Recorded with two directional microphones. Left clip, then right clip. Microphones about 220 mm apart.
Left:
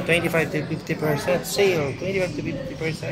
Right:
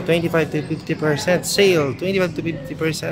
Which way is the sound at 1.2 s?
35° right (ahead or behind).